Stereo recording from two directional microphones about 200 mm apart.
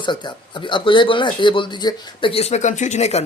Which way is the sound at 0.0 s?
20° left (ahead or behind).